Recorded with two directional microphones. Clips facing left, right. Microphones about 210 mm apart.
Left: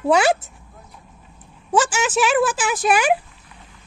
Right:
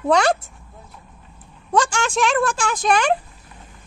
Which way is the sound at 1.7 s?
5° left (ahead or behind).